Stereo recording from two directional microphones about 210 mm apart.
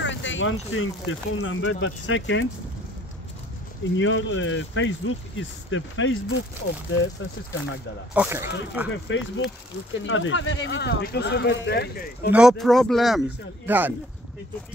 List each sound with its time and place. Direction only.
0.0 s speech: 60° left (ahead or behind)
4.0 s speech: 65° left (ahead or behind)
8.1 s speech: 10° right (ahead or behind)
8.9 s speech: 60° left (ahead or behind)
12.3 s speech: 5° right (ahead or behind)